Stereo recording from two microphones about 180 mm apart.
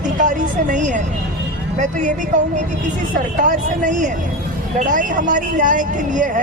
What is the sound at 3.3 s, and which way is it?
Speech, 45° right (ahead or behind).